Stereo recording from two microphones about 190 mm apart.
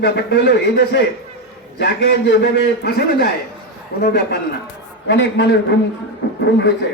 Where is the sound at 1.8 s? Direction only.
65° left (ahead or behind).